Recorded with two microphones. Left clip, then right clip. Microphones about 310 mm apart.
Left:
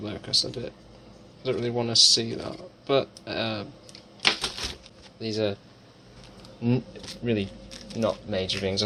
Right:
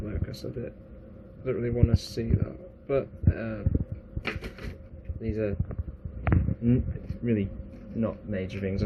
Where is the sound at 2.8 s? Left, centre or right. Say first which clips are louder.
Left 4 dB; centre.